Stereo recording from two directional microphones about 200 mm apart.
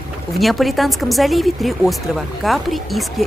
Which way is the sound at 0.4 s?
Centre (ahead or behind).